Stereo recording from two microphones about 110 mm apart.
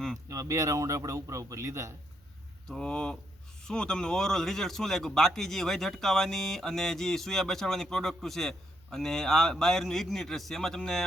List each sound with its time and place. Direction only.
0.3 s a man's voice: 30° right (ahead or behind)
2.6 s speech: 5° left (ahead or behind)